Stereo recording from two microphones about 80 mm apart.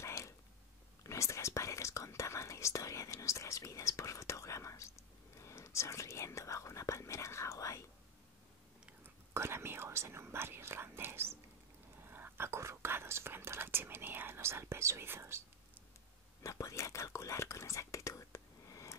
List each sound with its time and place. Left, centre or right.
0.0 s a sound: left
1.0 s speech: left
9.0 s speech: right
16.4 s speech: left